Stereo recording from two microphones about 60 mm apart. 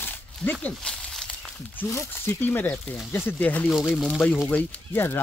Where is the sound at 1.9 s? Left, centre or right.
Left.